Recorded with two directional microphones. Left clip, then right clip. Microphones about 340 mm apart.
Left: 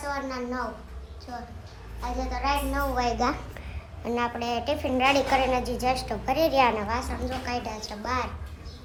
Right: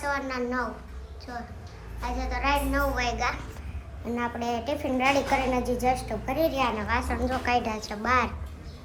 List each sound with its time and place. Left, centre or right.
0.0 s a child's voice: centre
2.0 s a woman's voice: centre
4.0 s a woman's voice: centre
6.5 s a woman's voice: centre